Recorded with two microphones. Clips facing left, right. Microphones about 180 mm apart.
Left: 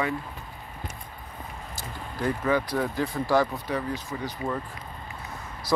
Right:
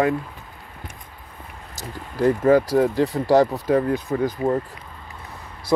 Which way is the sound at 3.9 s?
55° right (ahead or behind).